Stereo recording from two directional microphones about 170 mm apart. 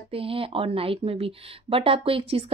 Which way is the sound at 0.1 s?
35° right (ahead or behind).